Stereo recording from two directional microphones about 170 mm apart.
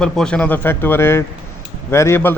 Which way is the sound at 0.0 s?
5° left (ahead or behind).